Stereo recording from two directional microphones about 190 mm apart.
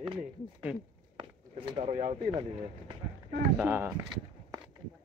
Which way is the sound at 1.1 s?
30° right (ahead or behind).